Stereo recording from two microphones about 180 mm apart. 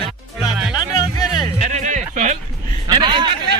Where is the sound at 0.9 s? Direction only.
20° left (ahead or behind).